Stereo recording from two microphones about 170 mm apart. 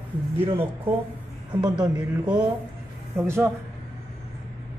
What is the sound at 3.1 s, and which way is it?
Speech, 15° right (ahead or behind).